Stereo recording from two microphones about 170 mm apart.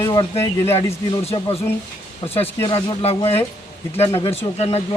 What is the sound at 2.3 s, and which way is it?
Speech, 10° left (ahead or behind).